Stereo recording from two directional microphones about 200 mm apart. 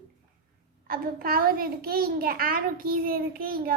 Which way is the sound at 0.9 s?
45° right (ahead or behind).